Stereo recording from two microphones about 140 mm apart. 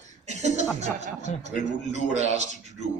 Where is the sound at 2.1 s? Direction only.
55° right (ahead or behind).